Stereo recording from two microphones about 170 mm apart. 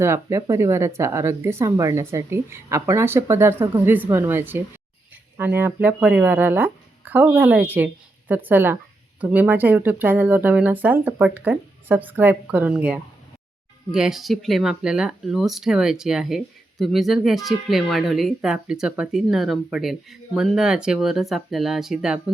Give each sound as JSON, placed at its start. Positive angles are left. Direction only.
{"t": 0.0, "sound": "speech", "side_deg": -15}